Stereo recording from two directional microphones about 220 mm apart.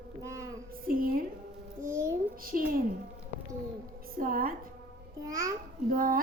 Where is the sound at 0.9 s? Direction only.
40° right (ahead or behind).